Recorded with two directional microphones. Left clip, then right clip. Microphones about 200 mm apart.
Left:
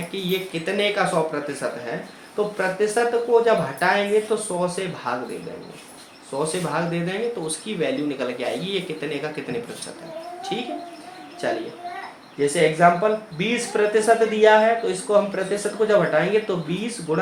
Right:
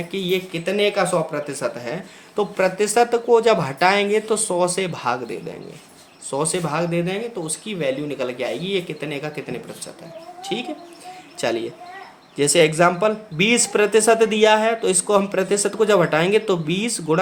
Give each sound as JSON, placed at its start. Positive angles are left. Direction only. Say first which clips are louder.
{"t": 0.1, "sound": "speech", "louder": "right 3 dB", "side_deg": -40}
{"t": 6.4, "sound": "speech", "louder": "right 1 dB", "side_deg": -45}
{"t": 10.5, "sound": "speech", "louder": "right 2 dB", "side_deg": -40}